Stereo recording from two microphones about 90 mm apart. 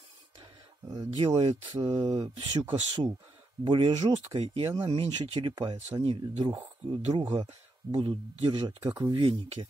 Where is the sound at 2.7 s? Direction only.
90° right.